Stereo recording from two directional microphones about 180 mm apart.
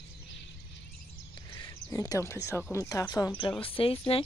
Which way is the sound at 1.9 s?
15° left (ahead or behind).